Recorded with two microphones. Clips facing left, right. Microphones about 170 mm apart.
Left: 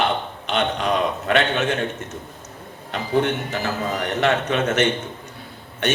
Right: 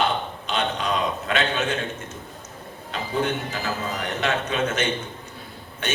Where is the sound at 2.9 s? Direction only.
65° left (ahead or behind).